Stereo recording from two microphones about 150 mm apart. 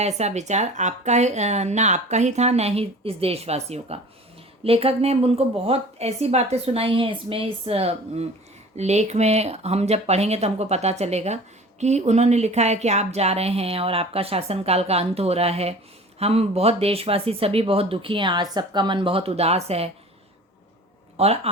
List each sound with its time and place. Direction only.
0.0 s speech: 45° right (ahead or behind)
21.2 s speech: 40° right (ahead or behind)